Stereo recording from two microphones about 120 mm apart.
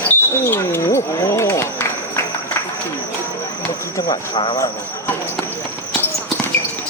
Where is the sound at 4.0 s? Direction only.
30° left (ahead or behind).